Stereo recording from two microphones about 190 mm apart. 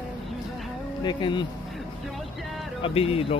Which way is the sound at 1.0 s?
25° left (ahead or behind).